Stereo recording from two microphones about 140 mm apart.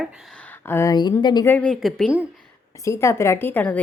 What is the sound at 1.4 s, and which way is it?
Speech, 10° left (ahead or behind).